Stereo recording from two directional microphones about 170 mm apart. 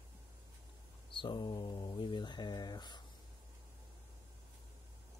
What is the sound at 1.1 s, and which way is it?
Speech, 25° left (ahead or behind).